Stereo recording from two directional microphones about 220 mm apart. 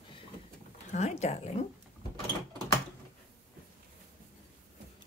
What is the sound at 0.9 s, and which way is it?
Speech, 30° left (ahead or behind).